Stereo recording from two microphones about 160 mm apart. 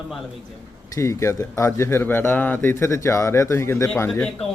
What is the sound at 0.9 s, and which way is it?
A man's voice, 20° left (ahead or behind).